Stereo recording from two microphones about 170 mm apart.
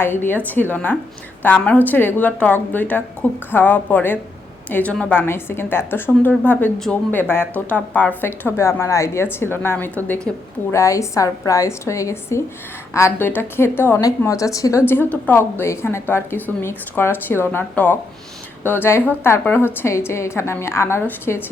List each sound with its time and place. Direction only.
0.0 s a woman's voice: 10° left (ahead or behind)
10.7 s a woman's voice: 15° left (ahead or behind)